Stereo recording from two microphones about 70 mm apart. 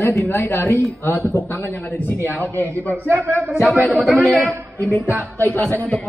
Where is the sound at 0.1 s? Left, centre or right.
Left.